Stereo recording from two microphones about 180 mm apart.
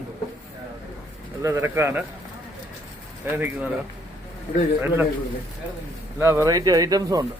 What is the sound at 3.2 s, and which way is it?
Speech, 10° right (ahead or behind).